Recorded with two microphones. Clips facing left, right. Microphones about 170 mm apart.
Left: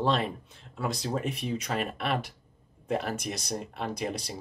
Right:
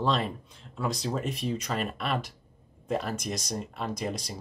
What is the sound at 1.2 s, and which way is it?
Speech, 60° left (ahead or behind).